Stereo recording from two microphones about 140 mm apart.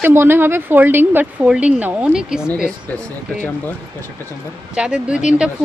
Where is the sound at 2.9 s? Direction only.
15° left (ahead or behind).